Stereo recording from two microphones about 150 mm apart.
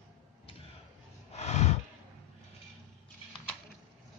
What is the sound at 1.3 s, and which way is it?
Snort, 50° left (ahead or behind).